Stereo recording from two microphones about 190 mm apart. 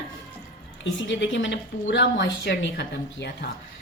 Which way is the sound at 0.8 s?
75° left (ahead or behind).